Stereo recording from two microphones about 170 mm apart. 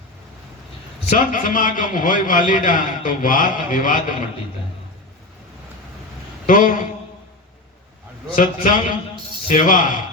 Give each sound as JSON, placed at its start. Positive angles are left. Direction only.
{"t": 1.1, "sound": "a man's voice", "side_deg": 55}
{"t": 6.5, "sound": "a man's voice", "side_deg": 50}
{"t": 8.4, "sound": "a man's voice", "side_deg": 50}